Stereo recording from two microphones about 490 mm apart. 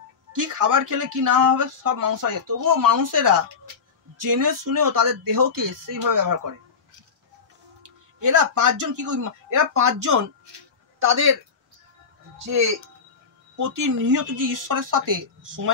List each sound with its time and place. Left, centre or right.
0.3 s speech: right
8.2 s speech: right
12.4 s speech: right